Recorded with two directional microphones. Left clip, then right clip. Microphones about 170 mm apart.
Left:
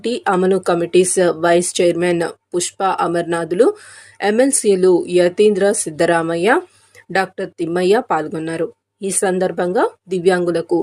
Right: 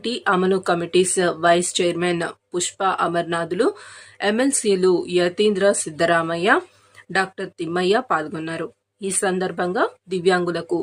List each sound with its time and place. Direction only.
0.0 s speech: 15° left (ahead or behind)